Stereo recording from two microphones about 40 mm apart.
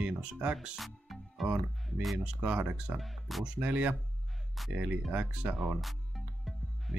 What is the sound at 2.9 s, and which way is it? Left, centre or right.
Speech, centre.